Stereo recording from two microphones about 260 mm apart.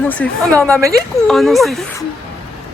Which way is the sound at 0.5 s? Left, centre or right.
Centre.